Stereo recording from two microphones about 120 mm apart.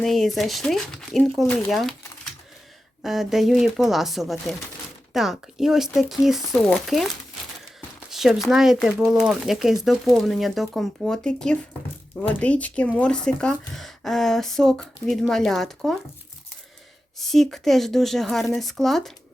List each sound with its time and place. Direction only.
0.0 s speech: centre (ahead or behind)
3.0 s speech: 5° right (ahead or behind)
8.1 s a sound: centre (ahead or behind)
8.4 s speech: 5° right (ahead or behind)
17.2 s speech: centre (ahead or behind)